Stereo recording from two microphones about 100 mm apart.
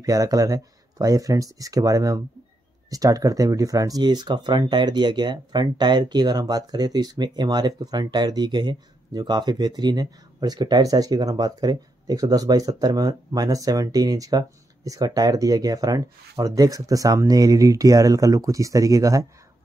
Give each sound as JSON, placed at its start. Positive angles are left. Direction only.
{"t": 0.0, "sound": "speech", "side_deg": -35}